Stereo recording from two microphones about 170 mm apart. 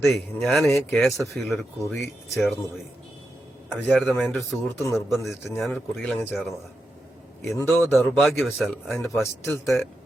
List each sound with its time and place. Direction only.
0.0 s a man's voice: centre (ahead or behind)
1.8 s speech: 15° left (ahead or behind)
2.3 s a man's voice: centre (ahead or behind)
3.7 s a man's voice: centre (ahead or behind)
7.5 s a man's voice: centre (ahead or behind)
9.2 s speech: 15° left (ahead or behind)